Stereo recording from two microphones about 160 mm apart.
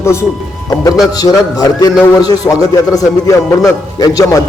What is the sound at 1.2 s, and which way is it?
A man's voice, 25° left (ahead or behind).